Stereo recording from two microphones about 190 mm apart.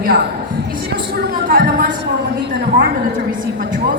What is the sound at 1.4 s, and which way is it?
Speech, 50° right (ahead or behind).